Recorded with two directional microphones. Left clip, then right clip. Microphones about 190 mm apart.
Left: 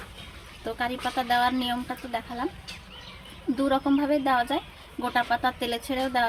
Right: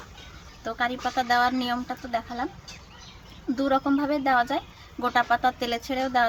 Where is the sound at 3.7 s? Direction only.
15° right (ahead or behind).